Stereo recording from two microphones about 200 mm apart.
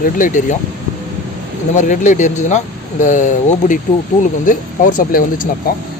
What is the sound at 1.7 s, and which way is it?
Speech, 40° left (ahead or behind).